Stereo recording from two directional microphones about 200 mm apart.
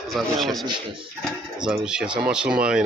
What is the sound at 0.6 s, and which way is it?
Speech, 25° right (ahead or behind).